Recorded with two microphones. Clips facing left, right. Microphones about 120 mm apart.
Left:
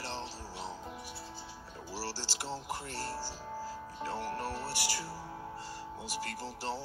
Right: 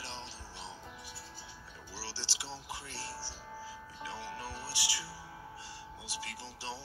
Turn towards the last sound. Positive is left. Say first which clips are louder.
# left 5 dB
turn(degrees=45)  # may be behind; listen again after turning